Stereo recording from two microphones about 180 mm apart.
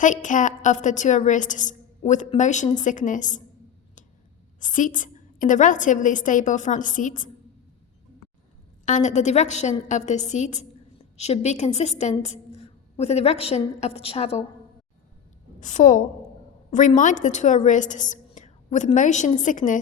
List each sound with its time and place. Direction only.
0.0 s a woman's voice: 45° left (ahead or behind)
4.6 s a woman's voice: 45° left (ahead or behind)
8.8 s a woman's voice: 45° left (ahead or behind)
15.6 s a woman's voice: 45° left (ahead or behind)